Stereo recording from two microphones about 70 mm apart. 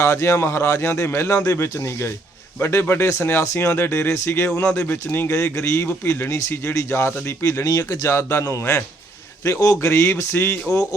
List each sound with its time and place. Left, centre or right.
0.0 s a man's voice: left
3.8 s a man's voice: left